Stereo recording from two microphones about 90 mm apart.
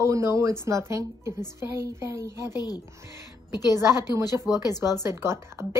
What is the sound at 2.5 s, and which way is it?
Child singing, 45° left (ahead or behind).